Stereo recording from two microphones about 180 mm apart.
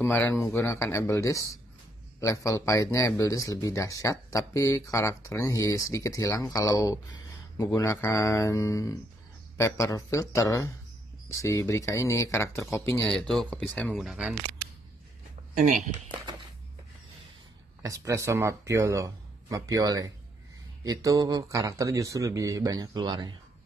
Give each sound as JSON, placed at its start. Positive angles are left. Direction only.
{"t": 0.0, "sound": "speech", "side_deg": 10}
{"t": 13.0, "sound": "speech", "side_deg": 5}
{"t": 15.5, "sound": "speech", "side_deg": -40}
{"t": 17.8, "sound": "speech", "side_deg": -15}